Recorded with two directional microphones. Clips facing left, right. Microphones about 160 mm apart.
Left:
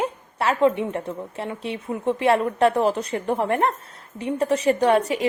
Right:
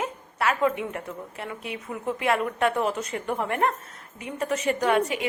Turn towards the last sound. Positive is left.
turn(degrees=35)  # may be behind; listen again after turning